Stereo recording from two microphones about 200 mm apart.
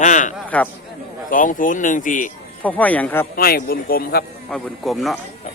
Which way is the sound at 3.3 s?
50° left (ahead or behind).